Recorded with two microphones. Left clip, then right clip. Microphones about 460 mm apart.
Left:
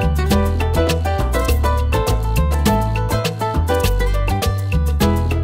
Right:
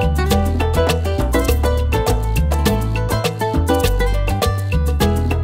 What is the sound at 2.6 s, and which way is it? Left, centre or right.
Music, right.